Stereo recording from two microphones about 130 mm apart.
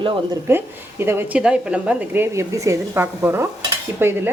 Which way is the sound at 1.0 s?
20° right (ahead or behind).